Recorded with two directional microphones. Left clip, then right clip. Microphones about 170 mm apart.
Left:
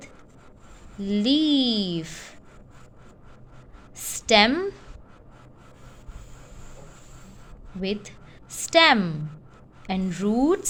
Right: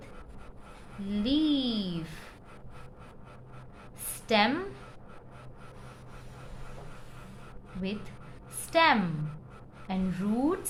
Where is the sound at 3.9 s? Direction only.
50° left (ahead or behind).